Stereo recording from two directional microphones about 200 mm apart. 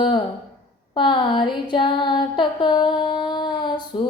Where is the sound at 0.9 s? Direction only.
25° left (ahead or behind).